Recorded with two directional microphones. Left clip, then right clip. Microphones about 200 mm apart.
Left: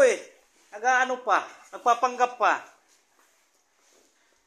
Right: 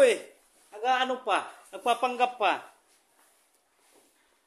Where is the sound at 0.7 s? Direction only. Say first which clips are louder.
Left 3 dB; 25° right (ahead or behind).